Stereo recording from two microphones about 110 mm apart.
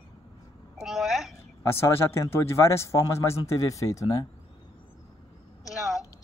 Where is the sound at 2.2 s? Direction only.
25° left (ahead or behind).